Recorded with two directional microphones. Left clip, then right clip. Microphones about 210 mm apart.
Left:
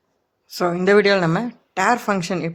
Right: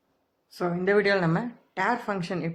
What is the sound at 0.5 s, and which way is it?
A man's voice, 40° left (ahead or behind).